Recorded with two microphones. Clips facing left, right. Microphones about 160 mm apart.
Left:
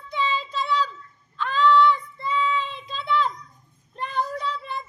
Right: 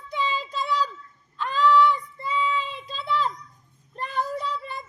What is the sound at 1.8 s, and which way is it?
Female singing, 40° right (ahead or behind).